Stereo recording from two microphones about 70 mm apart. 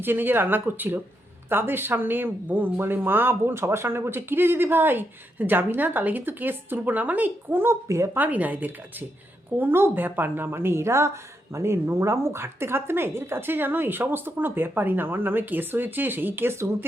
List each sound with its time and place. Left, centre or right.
0.0 s speech: right
8.1 s speech: right